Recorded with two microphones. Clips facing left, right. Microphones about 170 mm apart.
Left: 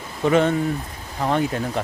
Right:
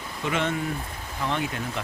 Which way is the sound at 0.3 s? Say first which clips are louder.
Left 9 dB; 40° left (ahead or behind).